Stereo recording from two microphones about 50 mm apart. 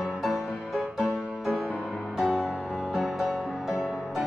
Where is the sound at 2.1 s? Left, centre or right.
Centre.